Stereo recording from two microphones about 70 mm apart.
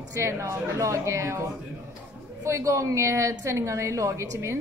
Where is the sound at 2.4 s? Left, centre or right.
Right.